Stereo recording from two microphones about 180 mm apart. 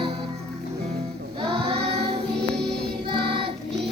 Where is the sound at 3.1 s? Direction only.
30° right (ahead or behind).